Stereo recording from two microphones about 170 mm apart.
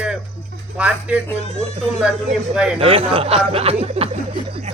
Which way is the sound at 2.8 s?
35° right (ahead or behind).